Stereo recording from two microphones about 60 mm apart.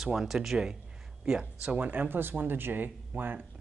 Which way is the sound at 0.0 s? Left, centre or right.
Centre.